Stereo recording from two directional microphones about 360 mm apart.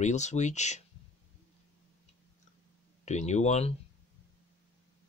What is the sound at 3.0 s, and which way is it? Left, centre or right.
Speech, centre.